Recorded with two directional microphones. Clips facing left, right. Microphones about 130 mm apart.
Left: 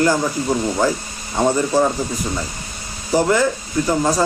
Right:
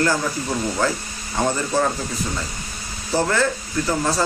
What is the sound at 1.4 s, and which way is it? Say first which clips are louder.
Speech: left 4 dB; 15° left (ahead or behind).